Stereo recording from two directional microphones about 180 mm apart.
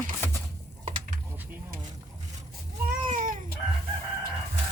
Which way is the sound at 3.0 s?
45° right (ahead or behind).